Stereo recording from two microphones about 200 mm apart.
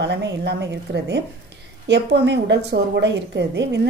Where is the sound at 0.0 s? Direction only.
60° right (ahead or behind).